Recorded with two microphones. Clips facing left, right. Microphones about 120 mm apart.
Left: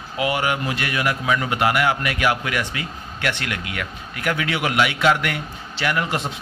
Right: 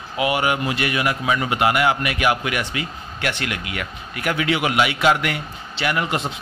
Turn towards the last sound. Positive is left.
turn(degrees=-15)  # may be behind; listen again after turning